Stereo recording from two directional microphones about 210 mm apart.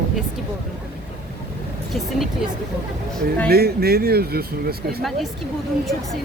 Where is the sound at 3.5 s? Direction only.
50° right (ahead or behind).